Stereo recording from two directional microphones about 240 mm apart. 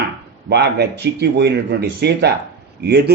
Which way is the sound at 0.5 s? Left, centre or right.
Right.